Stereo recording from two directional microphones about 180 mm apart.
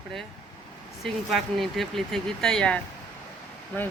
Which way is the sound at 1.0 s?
Centre (ahead or behind).